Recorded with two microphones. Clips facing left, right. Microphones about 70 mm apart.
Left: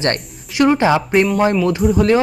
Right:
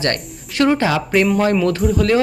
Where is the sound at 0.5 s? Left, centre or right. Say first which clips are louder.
Left 2 dB; centre.